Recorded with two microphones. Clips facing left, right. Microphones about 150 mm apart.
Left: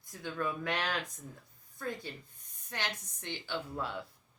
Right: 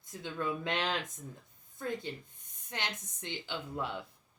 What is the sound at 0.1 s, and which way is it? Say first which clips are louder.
Speech: even; 20° right (ahead or behind).